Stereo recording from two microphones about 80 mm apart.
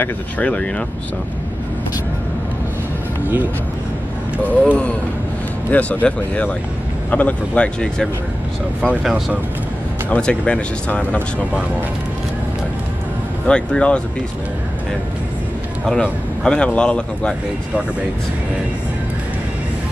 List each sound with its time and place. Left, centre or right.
0.0 s a man's voice: centre
4.5 s a man's voice: centre
10.0 s a man's voice: centre
13.5 s a man's voice: centre
15.9 s a man's voice: centre